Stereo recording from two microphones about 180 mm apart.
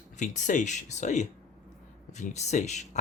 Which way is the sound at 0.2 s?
45° left (ahead or behind).